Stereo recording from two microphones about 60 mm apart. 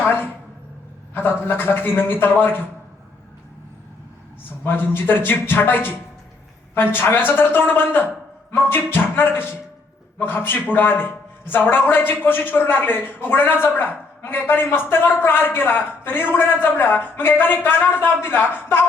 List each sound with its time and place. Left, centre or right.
0.0 s a sound: left
1.1 s a man's voice: left
4.6 s a man's voice: left